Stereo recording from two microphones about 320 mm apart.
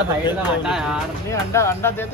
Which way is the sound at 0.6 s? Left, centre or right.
Centre.